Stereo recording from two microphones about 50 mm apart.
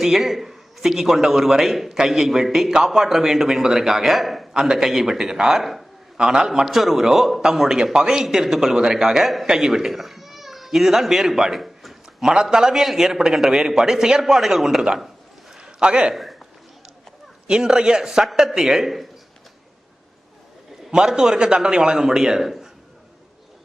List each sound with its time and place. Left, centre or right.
0.0 s a man's voice: centre
4.5 s a man's voice: centre
12.3 s a man's voice: centre
15.5 s a sound: centre
17.4 s a man's voice: centre
20.9 s a man's voice: centre